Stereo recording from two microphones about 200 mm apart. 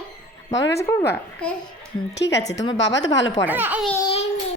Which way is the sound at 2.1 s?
60° left (ahead or behind).